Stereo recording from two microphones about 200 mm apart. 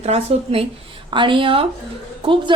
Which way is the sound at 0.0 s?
30° right (ahead or behind).